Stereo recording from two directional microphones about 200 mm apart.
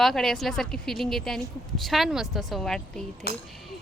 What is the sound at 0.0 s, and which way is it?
Speech, centre (ahead or behind).